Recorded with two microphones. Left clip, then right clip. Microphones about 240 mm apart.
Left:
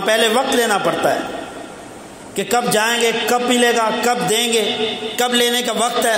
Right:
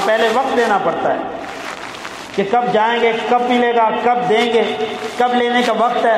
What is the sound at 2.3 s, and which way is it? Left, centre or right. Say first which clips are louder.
A man's voice: right 2 dB; left.